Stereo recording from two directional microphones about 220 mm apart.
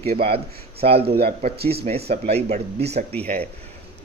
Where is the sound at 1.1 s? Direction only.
45° right (ahead or behind).